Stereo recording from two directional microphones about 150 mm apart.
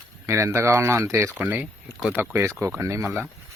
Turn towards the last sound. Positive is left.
turn(degrees=-20)  # may be behind; listen again after turning